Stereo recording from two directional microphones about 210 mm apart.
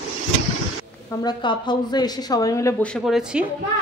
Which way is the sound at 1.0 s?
20° left (ahead or behind).